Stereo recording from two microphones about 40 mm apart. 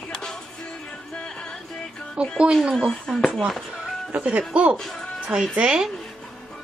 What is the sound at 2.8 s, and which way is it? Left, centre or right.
Speech, centre.